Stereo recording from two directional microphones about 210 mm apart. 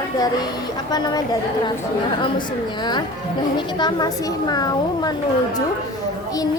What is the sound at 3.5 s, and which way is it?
A child's voice, 20° left (ahead or behind).